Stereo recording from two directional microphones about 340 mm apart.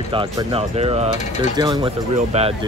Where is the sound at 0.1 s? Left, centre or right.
Centre.